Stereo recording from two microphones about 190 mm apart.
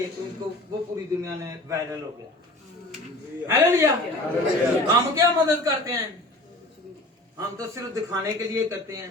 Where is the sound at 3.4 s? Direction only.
15° right (ahead or behind).